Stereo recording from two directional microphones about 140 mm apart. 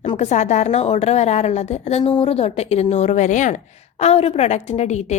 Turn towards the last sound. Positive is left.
turn(degrees=55)  # may be behind; listen again after turning